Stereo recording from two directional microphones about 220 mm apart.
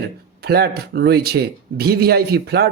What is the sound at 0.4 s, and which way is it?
Speech, 45° right (ahead or behind).